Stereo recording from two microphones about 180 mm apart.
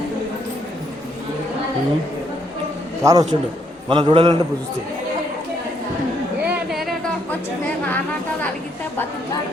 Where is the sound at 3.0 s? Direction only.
20° right (ahead or behind).